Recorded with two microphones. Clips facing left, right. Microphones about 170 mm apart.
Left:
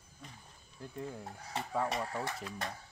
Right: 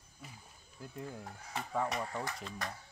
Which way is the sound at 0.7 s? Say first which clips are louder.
Left 2 dB; centre (ahead or behind).